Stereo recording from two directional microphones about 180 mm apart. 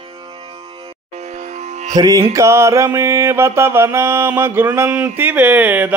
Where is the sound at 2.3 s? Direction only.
15° right (ahead or behind).